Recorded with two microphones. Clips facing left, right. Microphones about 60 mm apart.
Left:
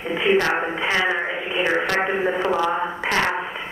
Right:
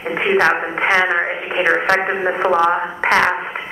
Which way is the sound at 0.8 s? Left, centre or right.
Right.